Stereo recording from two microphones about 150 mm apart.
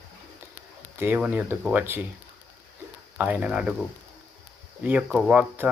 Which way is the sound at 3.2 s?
10° right (ahead or behind).